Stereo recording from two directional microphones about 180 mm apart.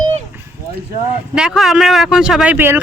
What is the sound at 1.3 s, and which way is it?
Speech, 5° right (ahead or behind).